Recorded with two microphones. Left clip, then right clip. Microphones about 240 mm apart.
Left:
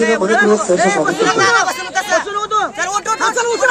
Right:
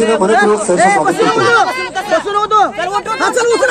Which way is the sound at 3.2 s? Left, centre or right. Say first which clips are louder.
Right 5 dB; right.